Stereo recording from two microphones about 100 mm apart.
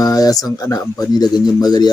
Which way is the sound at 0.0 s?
40° left (ahead or behind).